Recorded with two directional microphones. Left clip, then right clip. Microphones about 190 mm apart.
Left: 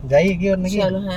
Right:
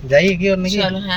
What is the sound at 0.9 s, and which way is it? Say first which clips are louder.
Speech: right 1 dB; 30° left (ahead or behind).